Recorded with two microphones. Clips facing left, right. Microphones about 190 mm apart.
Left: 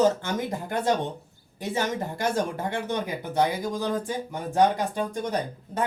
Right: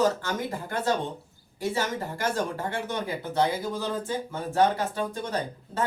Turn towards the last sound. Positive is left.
turn(degrees=15)  # may be behind; listen again after turning